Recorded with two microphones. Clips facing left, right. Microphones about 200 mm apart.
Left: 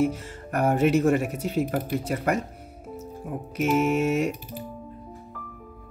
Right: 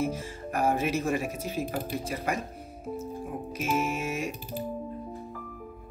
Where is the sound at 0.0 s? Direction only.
65° left (ahead or behind).